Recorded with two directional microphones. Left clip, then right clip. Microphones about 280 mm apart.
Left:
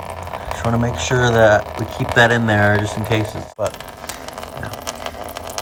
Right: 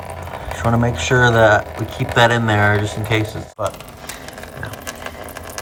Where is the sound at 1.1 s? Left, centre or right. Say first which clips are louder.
Right 1 dB; centre.